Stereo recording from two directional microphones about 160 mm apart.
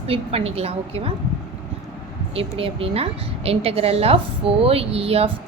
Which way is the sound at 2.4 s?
35° right (ahead or behind).